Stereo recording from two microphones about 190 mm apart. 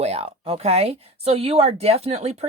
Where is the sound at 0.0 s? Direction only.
35° right (ahead or behind).